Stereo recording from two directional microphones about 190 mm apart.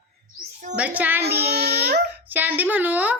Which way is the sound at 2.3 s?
10° right (ahead or behind).